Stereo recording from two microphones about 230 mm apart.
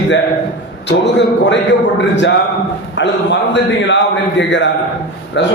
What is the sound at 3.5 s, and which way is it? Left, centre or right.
A man's voice, left.